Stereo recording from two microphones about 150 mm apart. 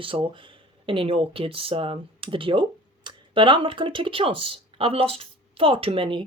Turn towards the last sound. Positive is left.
turn(degrees=-35)  # may be behind; listen again after turning